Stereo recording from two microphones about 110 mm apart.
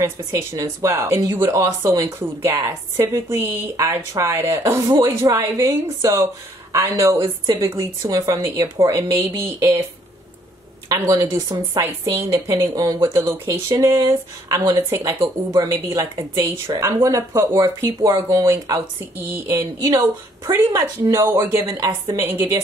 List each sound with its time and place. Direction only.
0.0 s speech: 25° right (ahead or behind)
10.9 s speech: 30° right (ahead or behind)